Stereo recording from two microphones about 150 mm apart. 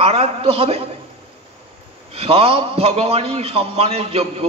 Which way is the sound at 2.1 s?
40° right (ahead or behind).